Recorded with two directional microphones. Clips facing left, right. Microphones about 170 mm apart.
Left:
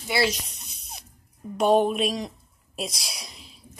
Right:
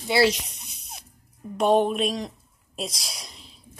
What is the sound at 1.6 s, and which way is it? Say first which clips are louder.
A woman's voice: even; centre (ahead or behind).